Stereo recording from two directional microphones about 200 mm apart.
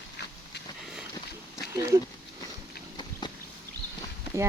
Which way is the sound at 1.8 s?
15° right (ahead or behind).